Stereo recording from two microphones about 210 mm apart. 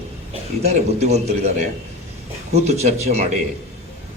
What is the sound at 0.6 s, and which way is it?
A man's voice, 30° right (ahead or behind).